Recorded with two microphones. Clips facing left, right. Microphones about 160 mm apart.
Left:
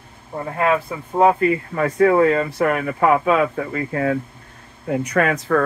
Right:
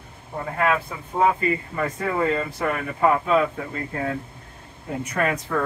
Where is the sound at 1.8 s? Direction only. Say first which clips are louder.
Left 12 dB; 80° left.